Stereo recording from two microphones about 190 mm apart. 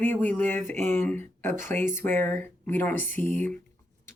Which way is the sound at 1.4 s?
40° right (ahead or behind).